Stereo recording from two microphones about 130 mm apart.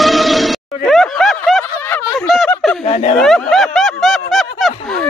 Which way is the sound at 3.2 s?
Centre (ahead or behind).